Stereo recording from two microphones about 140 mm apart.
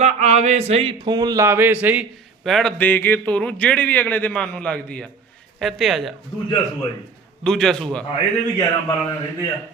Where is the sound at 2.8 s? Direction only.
15° left (ahead or behind).